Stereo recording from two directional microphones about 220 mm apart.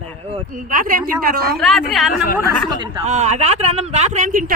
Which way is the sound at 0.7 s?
40° right (ahead or behind).